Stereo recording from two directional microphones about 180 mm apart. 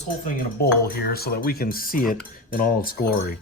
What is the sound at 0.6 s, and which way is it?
Cutlery, 60° left (ahead or behind).